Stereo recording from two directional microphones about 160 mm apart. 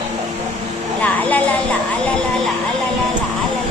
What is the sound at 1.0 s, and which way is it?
A woman's voice, 10° left (ahead or behind).